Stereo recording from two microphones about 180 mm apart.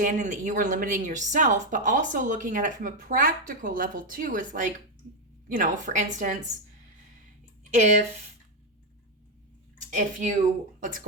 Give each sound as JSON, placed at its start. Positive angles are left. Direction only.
{"t": 0.0, "sound": "speech", "side_deg": -45}
{"t": 7.7, "sound": "speech", "side_deg": -40}
{"t": 9.9, "sound": "speech", "side_deg": -45}